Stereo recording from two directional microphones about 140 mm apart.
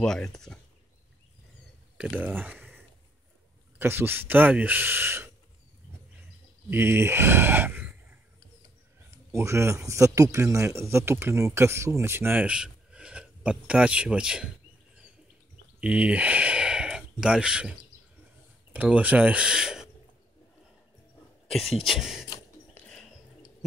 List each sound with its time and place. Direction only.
0.0 s speech: 5° left (ahead or behind)
2.0 s speech: 10° right (ahead or behind)
3.7 s speech: 15° right (ahead or behind)
6.7 s speech: 15° right (ahead or behind)
15.8 s a sound: 10° right (ahead or behind)
18.7 s speech: 10° right (ahead or behind)
21.8 s speech: centre (ahead or behind)
22.8 s a sound: 5° left (ahead or behind)